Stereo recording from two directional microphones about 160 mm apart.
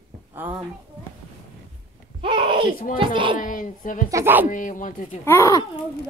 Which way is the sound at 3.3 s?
55° left (ahead or behind).